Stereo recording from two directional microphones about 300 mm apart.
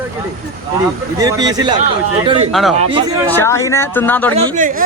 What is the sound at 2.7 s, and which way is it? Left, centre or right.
Speech, centre.